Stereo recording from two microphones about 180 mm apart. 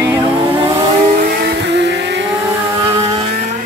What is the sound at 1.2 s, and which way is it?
Vehicle, 65° right (ahead or behind).